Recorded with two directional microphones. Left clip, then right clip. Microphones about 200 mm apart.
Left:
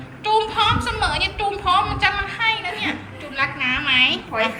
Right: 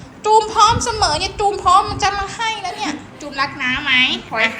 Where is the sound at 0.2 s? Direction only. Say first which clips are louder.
Right 6 dB; 20° right (ahead or behind); by 4.4 s centre (ahead or behind).